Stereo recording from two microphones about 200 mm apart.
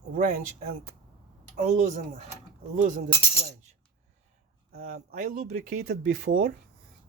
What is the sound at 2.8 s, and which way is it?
Speech, 40° right (ahead or behind).